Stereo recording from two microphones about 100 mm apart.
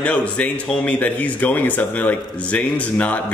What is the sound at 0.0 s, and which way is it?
Speech, 15° left (ahead or behind).